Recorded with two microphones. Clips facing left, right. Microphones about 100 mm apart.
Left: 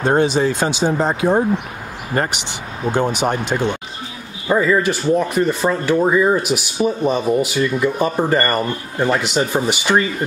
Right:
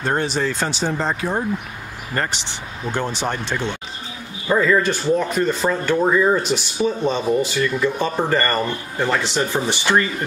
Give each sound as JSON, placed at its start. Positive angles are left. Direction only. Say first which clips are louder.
{"t": 0.0, "sound": "speech", "louder": "left 6 dB", "side_deg": 15}
{"t": 2.9, "sound": "speech", "louder": "left 6 dB", "side_deg": 15}